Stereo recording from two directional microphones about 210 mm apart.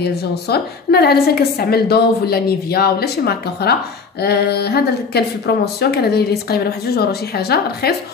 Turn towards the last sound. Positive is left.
turn(degrees=50)  # may be behind; listen again after turning